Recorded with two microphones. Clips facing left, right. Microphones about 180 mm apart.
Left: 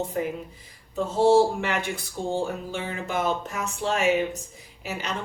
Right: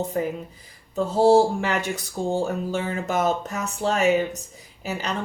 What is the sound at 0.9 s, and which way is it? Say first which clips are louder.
Speech: right 2 dB; 35° right (ahead or behind).